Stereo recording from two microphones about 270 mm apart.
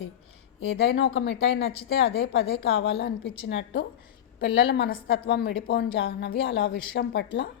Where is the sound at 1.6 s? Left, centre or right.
Centre.